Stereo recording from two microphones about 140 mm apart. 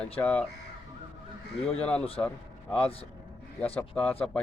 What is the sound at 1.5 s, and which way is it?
Speech, 10° left (ahead or behind).